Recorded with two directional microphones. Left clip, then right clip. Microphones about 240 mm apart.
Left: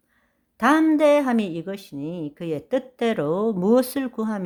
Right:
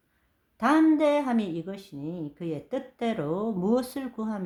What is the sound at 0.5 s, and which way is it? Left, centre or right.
Speech, left.